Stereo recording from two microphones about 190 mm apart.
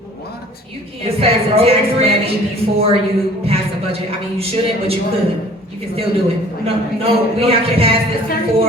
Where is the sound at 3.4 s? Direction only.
30° right (ahead or behind).